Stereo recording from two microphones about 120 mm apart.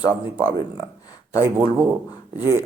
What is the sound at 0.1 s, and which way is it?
Speech, 15° right (ahead or behind).